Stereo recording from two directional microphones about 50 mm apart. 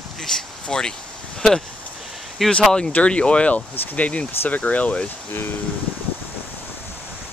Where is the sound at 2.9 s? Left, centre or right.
Left.